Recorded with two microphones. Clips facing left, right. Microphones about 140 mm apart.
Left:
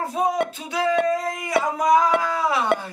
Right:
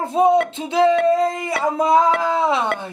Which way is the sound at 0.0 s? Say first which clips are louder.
Right 7 dB; 25° right (ahead or behind).